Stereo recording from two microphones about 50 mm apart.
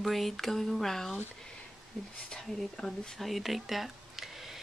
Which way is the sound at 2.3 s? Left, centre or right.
Centre.